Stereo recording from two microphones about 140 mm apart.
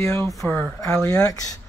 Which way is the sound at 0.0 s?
15° left (ahead or behind).